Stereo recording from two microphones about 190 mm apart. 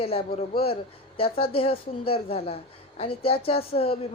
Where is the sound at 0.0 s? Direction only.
30° left (ahead or behind).